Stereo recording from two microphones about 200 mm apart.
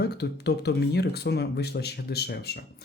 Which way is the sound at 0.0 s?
55° left (ahead or behind).